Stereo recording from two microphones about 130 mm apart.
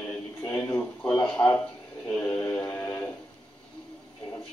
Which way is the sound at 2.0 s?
10° left (ahead or behind).